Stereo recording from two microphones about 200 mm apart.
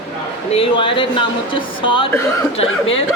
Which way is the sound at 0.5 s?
25° left (ahead or behind).